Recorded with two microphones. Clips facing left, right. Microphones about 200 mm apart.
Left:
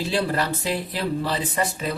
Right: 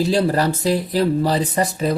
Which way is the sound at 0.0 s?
40° right (ahead or behind).